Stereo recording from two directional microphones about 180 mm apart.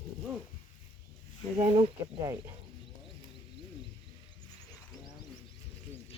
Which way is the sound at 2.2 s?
20° right (ahead or behind).